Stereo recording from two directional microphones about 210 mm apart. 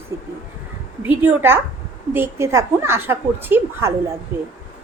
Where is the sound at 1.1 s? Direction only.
10° right (ahead or behind).